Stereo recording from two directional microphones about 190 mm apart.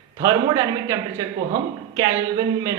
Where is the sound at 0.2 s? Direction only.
20° right (ahead or behind).